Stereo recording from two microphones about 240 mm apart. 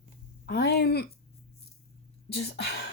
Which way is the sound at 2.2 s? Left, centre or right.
Left.